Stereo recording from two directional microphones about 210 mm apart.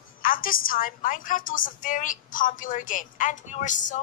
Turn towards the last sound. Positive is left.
turn(degrees=35)  # may be behind; listen again after turning